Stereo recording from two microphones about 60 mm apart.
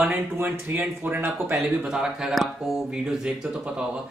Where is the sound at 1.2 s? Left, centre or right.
Right.